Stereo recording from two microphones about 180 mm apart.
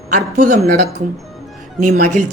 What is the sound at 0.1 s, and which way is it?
Speech, 45° right (ahead or behind).